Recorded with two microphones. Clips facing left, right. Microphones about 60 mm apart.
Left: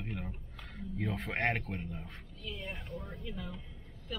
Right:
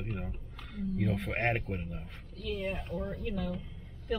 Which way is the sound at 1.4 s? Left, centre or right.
Centre.